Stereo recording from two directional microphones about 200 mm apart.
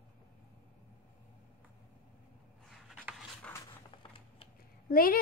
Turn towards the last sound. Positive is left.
turn(degrees=45)  # may be behind; listen again after turning